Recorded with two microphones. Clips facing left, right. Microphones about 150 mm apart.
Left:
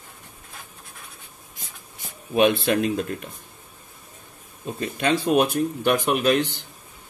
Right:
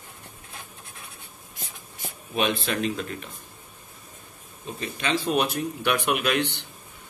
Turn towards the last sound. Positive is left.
turn(degrees=40)  # may be behind; listen again after turning